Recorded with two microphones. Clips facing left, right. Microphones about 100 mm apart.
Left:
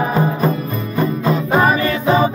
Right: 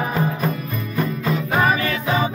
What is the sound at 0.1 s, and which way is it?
Music, 30° left (ahead or behind).